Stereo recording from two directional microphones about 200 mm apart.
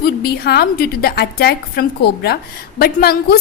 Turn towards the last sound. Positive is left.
turn(degrees=50)  # may be behind; listen again after turning